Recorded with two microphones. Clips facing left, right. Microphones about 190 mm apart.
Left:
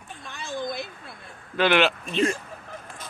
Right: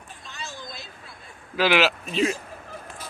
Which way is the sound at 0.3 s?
55° left (ahead or behind).